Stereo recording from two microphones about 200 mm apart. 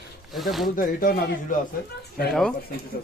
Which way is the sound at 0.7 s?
45° left (ahead or behind).